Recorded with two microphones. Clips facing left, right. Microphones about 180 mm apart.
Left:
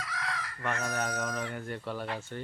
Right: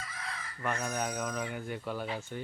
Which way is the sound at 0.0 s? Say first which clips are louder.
Left 5 dB; 75° left (ahead or behind).